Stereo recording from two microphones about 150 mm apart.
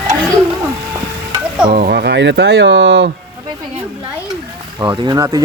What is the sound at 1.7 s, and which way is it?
Speech, 80° right.